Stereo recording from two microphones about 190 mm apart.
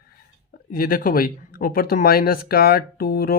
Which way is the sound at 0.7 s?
50° left (ahead or behind).